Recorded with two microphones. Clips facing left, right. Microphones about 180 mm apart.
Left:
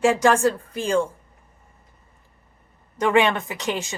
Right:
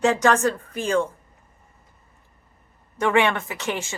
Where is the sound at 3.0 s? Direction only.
15° left (ahead or behind).